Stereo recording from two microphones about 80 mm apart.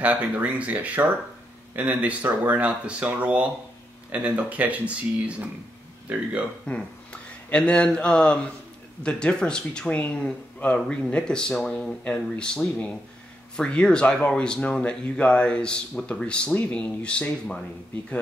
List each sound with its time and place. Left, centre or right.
0.0 s speech: centre
6.6 s speech: centre